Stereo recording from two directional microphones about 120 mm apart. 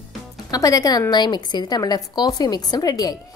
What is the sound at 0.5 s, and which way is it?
A woman's voice, 30° left (ahead or behind).